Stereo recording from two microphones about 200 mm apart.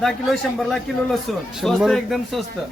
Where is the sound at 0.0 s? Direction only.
Centre (ahead or behind).